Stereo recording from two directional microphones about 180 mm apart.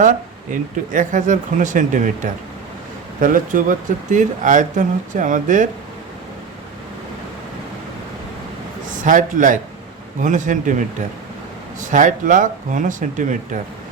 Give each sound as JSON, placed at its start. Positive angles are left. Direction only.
{"t": 0.0, "sound": "speech", "side_deg": -45}
{"t": 8.9, "sound": "a man's voice", "side_deg": -45}